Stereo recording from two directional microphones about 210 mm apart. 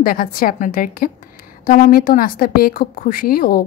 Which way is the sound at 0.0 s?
45° left (ahead or behind).